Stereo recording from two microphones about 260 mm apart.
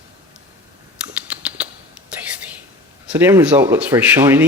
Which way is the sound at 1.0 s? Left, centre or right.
Centre.